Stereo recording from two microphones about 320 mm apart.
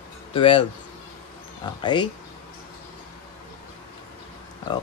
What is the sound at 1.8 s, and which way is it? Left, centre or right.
Speech, centre.